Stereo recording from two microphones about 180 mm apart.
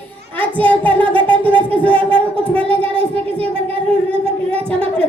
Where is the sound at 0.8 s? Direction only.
10° left (ahead or behind).